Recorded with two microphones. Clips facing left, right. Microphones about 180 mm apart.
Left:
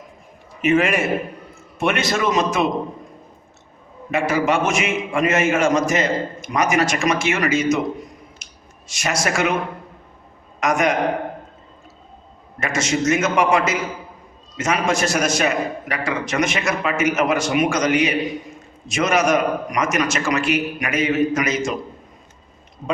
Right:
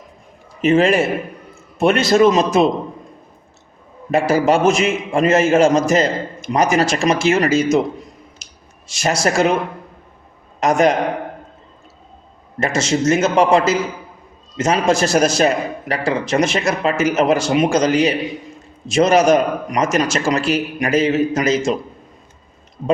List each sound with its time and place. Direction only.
0.6 s a man's voice: 30° right (ahead or behind)
4.1 s a man's voice: 35° right (ahead or behind)
8.4 s a sound: 35° right (ahead or behind)
8.9 s a man's voice: 30° right (ahead or behind)
10.6 s a man's voice: 30° right (ahead or behind)
12.5 s a man's voice: 30° right (ahead or behind)